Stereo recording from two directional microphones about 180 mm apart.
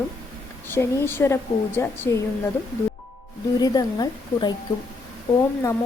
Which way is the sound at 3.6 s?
20° left (ahead or behind).